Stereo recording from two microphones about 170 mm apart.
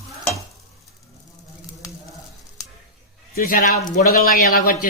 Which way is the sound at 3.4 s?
55° left (ahead or behind).